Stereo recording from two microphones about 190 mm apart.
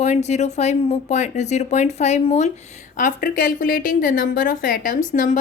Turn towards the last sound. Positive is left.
turn(degrees=45)  # may be behind; listen again after turning